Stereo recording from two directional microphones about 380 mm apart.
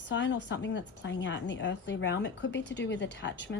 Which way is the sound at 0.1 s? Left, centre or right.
Left.